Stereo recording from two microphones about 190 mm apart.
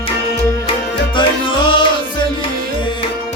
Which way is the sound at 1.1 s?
25° left (ahead or behind).